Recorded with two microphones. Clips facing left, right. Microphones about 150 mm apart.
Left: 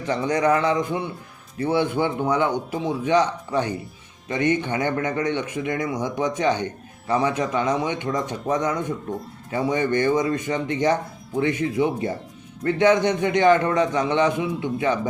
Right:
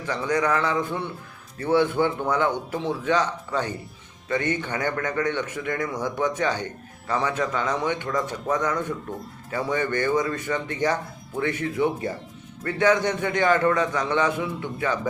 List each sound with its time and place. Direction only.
0.0 s a man's voice: 20° left (ahead or behind)